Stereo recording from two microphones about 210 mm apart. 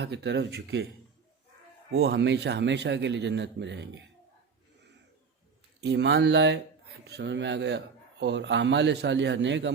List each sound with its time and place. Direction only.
0.0 s speech: 55° right (ahead or behind)
2.0 s speech: 55° right (ahead or behind)
5.8 s speech: 55° right (ahead or behind)